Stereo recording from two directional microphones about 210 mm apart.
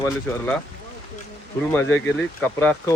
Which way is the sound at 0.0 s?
5° left (ahead or behind).